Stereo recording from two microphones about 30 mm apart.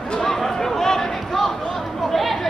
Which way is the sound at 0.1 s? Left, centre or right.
Left.